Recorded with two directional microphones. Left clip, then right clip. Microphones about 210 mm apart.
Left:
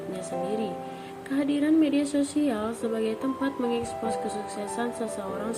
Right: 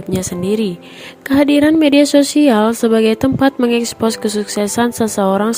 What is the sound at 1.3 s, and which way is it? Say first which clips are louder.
Speech: right 14 dB; 50° right (ahead or behind).